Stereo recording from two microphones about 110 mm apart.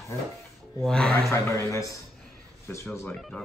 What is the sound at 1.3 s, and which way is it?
A man's voice, 25° left (ahead or behind).